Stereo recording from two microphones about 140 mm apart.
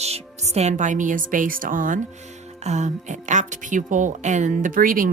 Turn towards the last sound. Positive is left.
turn(degrees=-80)